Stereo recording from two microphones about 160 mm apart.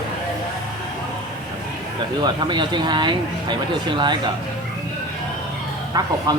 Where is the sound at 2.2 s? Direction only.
25° right (ahead or behind).